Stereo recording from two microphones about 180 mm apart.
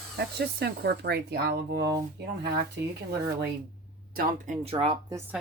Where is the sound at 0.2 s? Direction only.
65° right (ahead or behind).